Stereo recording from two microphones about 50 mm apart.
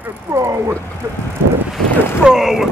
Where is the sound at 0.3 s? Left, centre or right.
Right.